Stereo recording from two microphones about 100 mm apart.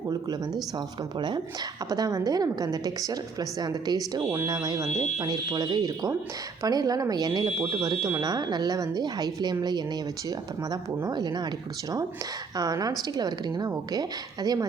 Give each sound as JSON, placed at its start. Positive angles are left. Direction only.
{"t": 1.9, "sound": "speech", "side_deg": -35}
{"t": 12.5, "sound": "speech", "side_deg": -40}